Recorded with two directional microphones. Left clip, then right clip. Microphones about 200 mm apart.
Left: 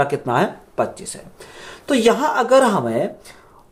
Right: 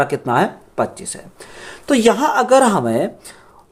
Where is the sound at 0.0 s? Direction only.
25° right (ahead or behind).